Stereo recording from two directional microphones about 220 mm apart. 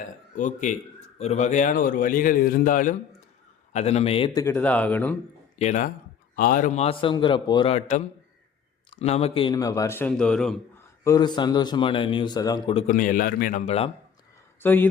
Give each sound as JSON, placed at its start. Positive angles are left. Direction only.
{"t": 0.3, "sound": "a man's voice", "side_deg": 35}
{"t": 4.4, "sound": "a man's voice", "side_deg": 10}
{"t": 5.5, "sound": "a man's voice", "side_deg": 35}
{"t": 11.0, "sound": "speech", "side_deg": 15}
{"t": 12.9, "sound": "a man's voice", "side_deg": 35}
{"t": 14.6, "sound": "speech", "side_deg": 10}